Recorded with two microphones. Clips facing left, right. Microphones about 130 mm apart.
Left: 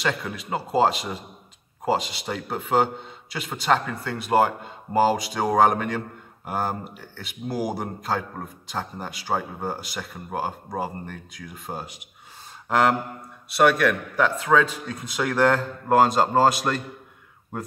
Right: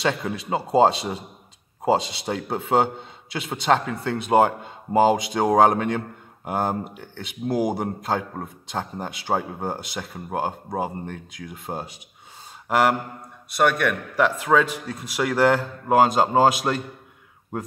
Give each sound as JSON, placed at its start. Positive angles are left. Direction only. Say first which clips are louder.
{"t": 0.0, "sound": "speech", "louder": "right 3 dB", "side_deg": -25}
{"t": 12.6, "sound": "speech", "louder": "right 1 dB", "side_deg": -5}
{"t": 13.6, "sound": "a man's voice", "louder": "left 2 dB", "side_deg": 5}
{"t": 14.1, "sound": "a man's voice", "louder": "right 3 dB", "side_deg": -10}